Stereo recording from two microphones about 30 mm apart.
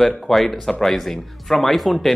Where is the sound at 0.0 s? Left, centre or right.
Centre.